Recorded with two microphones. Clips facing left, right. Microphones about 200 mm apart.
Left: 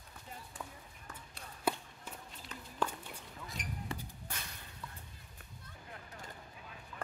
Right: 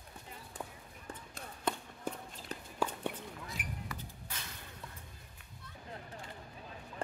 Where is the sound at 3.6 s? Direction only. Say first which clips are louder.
Left 3 dB; 5° right (ahead or behind).